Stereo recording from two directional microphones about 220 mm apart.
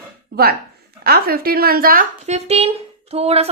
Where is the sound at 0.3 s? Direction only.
45° right (ahead or behind).